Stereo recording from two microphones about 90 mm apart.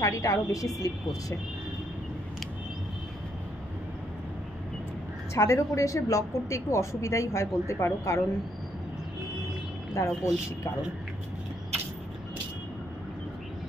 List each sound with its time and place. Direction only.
0.0 s a woman's voice: 35° left (ahead or behind)
5.3 s a woman's voice: 35° left (ahead or behind)
9.9 s a woman's voice: 30° left (ahead or behind)